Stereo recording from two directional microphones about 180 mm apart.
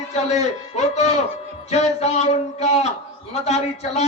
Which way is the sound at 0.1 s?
40° left (ahead or behind).